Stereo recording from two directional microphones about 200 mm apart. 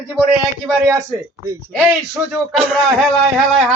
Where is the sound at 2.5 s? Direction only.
Centre (ahead or behind).